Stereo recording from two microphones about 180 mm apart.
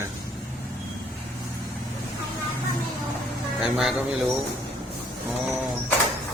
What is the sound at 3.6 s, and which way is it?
A man's voice, centre (ahead or behind).